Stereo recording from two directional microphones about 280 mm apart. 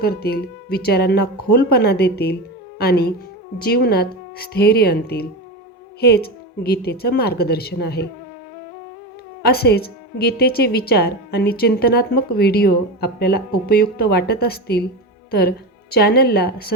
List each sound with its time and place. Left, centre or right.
0.0 s a woman's voice: left
9.4 s a woman's voice: left